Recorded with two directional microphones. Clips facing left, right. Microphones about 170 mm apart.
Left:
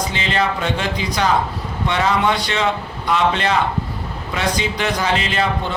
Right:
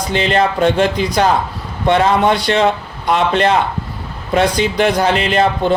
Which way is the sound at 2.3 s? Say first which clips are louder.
Right 7 dB; 65° right (ahead or behind).